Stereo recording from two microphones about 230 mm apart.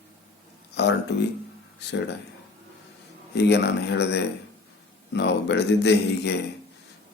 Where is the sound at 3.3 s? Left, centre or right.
Left.